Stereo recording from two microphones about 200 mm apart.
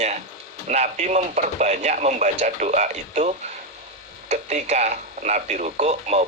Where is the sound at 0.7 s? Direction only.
35° right (ahead or behind).